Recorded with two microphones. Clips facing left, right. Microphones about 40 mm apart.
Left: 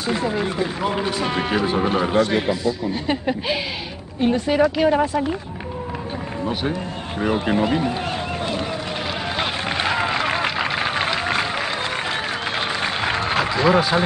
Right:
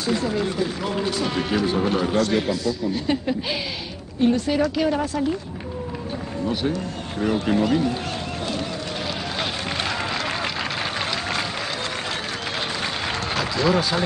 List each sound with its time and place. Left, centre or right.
0.0 s speech: left
6.4 s speech: left
9.4 s a sound: centre
12.8 s applause: left